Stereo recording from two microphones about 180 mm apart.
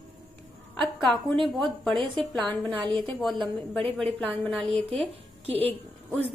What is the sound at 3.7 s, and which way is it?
A woman's voice, 5° left (ahead or behind).